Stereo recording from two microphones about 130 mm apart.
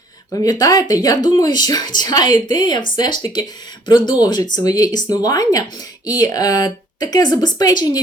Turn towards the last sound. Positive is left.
turn(degrees=30)  # may be behind; listen again after turning